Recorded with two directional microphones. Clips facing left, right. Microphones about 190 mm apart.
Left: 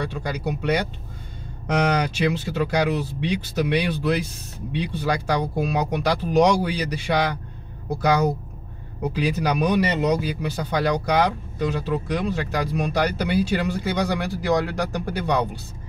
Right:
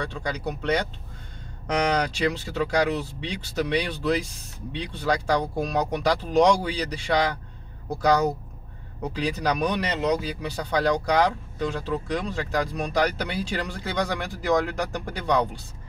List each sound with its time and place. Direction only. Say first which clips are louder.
0.0 s speech: left 2 dB; 5° left (ahead or behind)